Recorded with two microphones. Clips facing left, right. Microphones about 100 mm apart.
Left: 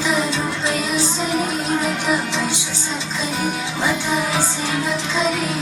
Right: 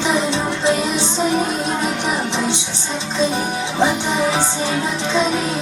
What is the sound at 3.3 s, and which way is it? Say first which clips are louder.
Music: right 4 dB; 20° right (ahead or behind).